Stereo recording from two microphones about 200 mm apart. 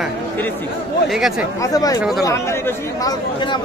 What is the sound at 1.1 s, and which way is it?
Speech, centre (ahead or behind).